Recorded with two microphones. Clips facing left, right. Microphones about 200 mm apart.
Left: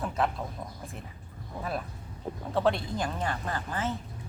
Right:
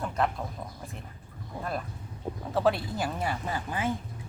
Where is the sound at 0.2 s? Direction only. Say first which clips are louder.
Right 1 dB; centre (ahead or behind).